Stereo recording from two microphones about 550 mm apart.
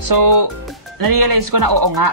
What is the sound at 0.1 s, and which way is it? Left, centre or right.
Speech, right.